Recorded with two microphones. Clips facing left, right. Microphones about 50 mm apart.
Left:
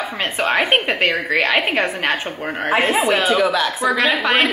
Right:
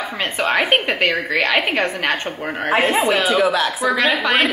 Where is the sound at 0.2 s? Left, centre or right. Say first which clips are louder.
Even; centre.